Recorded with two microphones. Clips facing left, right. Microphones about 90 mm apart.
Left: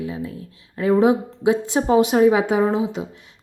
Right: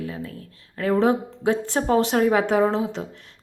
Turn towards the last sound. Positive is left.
turn(degrees=10)  # may be behind; listen again after turning